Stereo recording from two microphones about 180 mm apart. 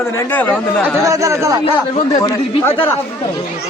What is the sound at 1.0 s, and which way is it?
Speech, 15° right (ahead or behind).